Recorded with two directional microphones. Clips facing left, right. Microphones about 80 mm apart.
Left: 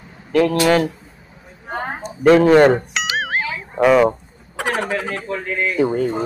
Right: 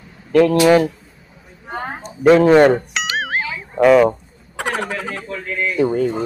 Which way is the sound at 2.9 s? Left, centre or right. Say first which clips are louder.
Even; centre.